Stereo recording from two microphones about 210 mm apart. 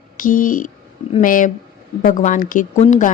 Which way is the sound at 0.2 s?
40° left (ahead or behind).